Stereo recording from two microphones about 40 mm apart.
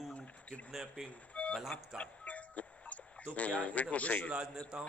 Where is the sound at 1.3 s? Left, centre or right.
Left.